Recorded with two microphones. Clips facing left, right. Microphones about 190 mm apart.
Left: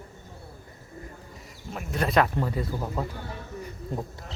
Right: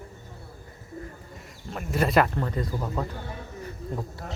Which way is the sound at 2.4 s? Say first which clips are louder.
Even; 10° left (ahead or behind).